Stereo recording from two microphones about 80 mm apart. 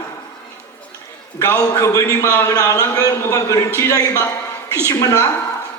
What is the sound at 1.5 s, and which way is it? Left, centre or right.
A man's voice, left.